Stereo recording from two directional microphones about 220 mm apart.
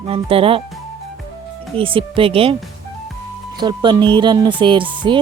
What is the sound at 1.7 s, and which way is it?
Speech, 25° right (ahead or behind).